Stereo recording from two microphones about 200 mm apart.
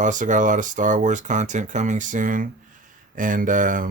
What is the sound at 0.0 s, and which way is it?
Speech, 40° right (ahead or behind).